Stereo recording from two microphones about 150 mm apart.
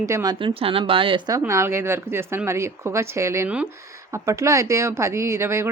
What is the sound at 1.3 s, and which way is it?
Speech, 20° right (ahead or behind).